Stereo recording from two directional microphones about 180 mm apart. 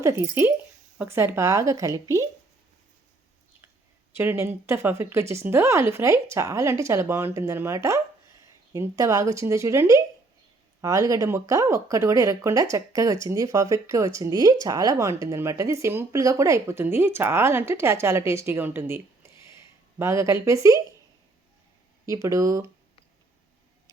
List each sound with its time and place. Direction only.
0.0 s speech: 15° right (ahead or behind)
4.2 s speech: 10° right (ahead or behind)
22.0 s speech: 15° right (ahead or behind)